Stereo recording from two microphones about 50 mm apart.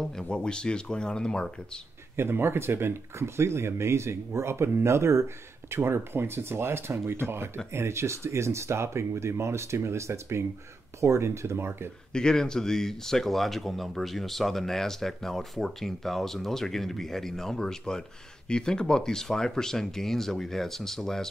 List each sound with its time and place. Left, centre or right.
0.0 s speech: centre
2.1 s speech: right
5.7 s speech: right
7.7 s speech: right
12.1 s speech: centre